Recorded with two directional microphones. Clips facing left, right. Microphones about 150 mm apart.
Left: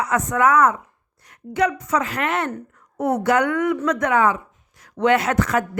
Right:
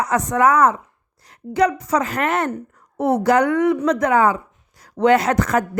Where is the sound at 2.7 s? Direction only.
30° right (ahead or behind).